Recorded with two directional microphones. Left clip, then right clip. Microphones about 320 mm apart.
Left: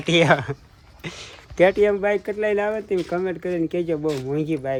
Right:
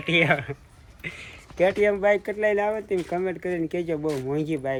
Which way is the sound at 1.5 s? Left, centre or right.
Left.